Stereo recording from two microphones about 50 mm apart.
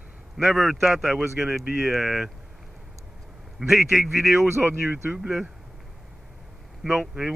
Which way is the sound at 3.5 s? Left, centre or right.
Centre.